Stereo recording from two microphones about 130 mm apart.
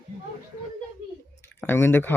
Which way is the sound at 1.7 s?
15° left (ahead or behind).